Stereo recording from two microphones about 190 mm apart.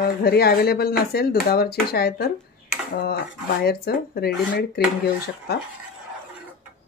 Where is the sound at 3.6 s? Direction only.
55° left (ahead or behind).